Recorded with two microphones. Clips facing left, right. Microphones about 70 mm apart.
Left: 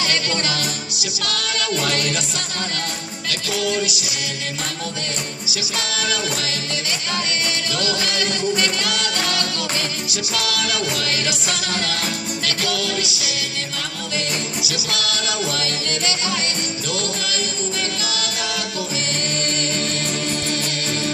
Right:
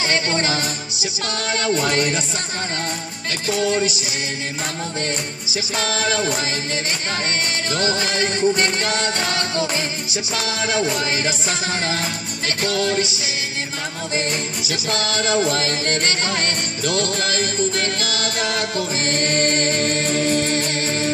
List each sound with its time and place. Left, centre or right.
0.0 s music: right
3.3 s music: right
5.5 s music: right
7.7 s music: right